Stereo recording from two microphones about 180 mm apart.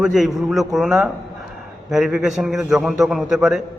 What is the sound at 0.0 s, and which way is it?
A man's voice, centre (ahead or behind).